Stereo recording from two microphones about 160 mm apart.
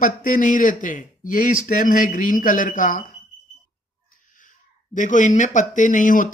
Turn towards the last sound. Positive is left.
turn(degrees=55)  # may be behind; listen again after turning